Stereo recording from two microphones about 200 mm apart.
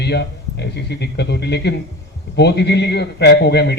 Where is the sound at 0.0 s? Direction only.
55° left (ahead or behind).